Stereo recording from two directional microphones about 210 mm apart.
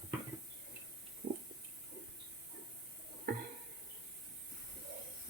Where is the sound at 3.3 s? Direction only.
45° right (ahead or behind).